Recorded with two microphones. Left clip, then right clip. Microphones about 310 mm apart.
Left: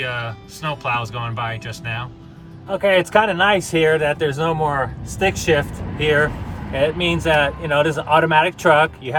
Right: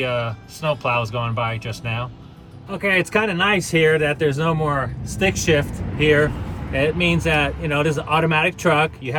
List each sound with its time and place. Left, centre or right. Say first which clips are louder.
0.0 s speech: right 2 dB; centre
2.6 s speech: left 4 dB; left